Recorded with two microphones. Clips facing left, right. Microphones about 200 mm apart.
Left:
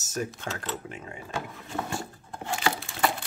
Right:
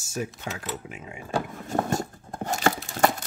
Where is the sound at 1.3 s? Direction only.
45° right (ahead or behind).